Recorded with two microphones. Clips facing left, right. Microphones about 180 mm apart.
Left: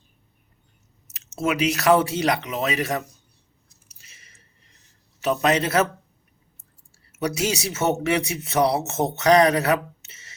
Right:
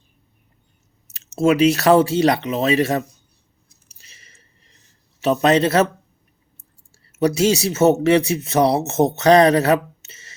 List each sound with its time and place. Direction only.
1.4 s speech: 30° right (ahead or behind)
4.0 s squish: 30° right (ahead or behind)
5.2 s speech: 30° right (ahead or behind)
7.2 s speech: 35° right (ahead or behind)